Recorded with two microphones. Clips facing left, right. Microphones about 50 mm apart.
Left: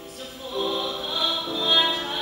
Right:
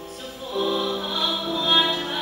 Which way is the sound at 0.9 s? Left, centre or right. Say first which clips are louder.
Right 2 dB; centre.